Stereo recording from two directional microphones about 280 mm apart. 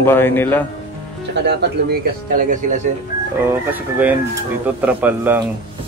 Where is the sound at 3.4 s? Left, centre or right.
Centre.